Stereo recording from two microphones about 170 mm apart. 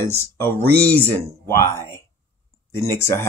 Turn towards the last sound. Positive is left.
turn(degrees=15)  # may be behind; listen again after turning